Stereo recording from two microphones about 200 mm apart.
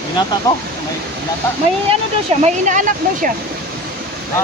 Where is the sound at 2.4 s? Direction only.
40° right (ahead or behind).